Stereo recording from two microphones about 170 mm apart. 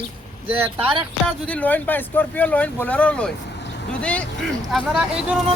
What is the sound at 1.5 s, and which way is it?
Speech, 10° left (ahead or behind).